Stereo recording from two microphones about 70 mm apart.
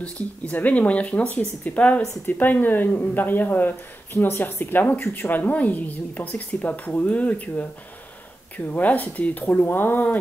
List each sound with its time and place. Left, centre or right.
0.0 s speech: left